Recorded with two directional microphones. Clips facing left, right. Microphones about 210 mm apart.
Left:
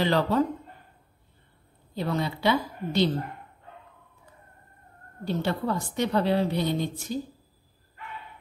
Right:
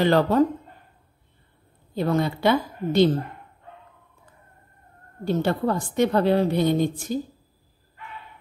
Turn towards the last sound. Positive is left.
turn(degrees=-50)  # may be behind; listen again after turning